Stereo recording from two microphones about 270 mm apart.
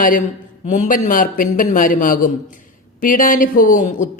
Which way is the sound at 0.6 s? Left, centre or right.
Left.